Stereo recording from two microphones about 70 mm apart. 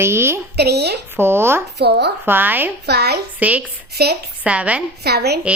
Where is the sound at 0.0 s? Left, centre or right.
Right.